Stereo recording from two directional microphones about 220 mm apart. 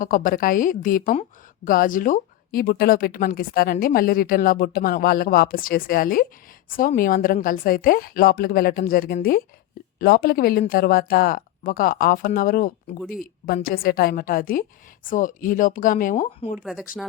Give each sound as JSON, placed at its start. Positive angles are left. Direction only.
{"t": 0.0, "sound": "speech", "side_deg": 40}